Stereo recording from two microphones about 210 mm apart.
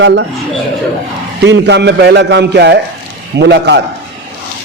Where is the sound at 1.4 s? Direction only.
55° right (ahead or behind).